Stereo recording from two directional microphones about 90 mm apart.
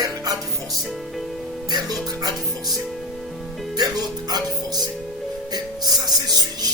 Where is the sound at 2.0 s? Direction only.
45° right (ahead or behind).